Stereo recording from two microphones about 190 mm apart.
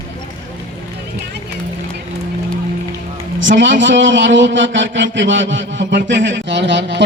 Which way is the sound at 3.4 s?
75° right (ahead or behind).